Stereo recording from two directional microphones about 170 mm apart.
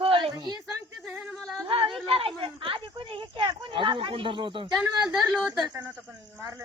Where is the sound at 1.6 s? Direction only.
30° right (ahead or behind).